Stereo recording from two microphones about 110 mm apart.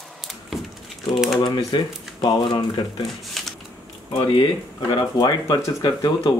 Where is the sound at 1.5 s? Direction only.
40° left (ahead or behind).